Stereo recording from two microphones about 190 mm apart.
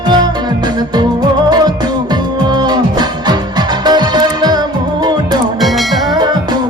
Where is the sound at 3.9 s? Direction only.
20° right (ahead or behind).